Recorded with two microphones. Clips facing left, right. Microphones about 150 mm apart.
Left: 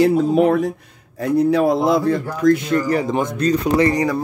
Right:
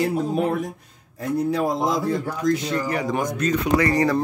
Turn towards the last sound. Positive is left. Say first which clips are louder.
# left 4 dB
turn(degrees=25)  # may be behind; listen again after turning